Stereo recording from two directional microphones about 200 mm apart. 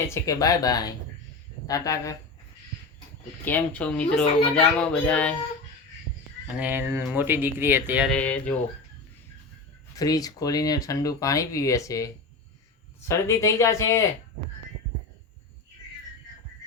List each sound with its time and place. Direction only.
0.1 s speech: 15° left (ahead or behind)
3.4 s speech: 10° left (ahead or behind)
6.6 s speech: 10° right (ahead or behind)
8.1 s speech: 5° left (ahead or behind)
9.9 s speech: 20° left (ahead or behind)